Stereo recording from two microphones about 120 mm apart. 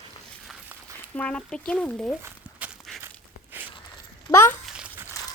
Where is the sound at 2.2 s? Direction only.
20° right (ahead or behind).